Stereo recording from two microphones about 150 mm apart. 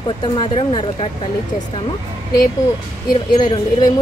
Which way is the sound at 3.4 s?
30° left (ahead or behind).